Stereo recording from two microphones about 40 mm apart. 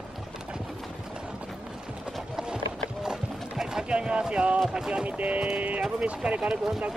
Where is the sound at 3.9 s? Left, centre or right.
Right.